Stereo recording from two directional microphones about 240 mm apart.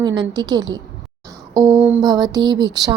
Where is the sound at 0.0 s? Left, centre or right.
Centre.